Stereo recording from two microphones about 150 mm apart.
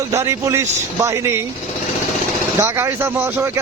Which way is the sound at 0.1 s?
20° right (ahead or behind).